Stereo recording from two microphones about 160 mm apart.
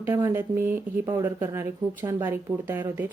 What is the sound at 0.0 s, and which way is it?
Speech, 15° right (ahead or behind).